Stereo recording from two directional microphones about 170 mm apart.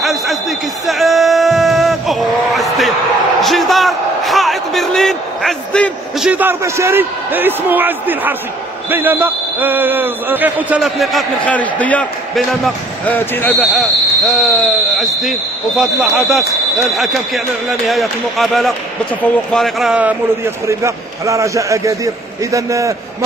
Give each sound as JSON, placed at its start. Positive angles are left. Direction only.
{"t": 0.0, "sound": "music", "side_deg": 0}
{"t": 3.4, "sound": "a sound", "side_deg": 0}
{"t": 8.9, "sound": "speech", "side_deg": -10}
{"t": 13.6, "sound": "speech", "side_deg": 0}